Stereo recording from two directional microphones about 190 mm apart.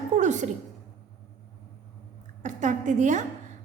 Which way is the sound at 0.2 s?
40° right (ahead or behind).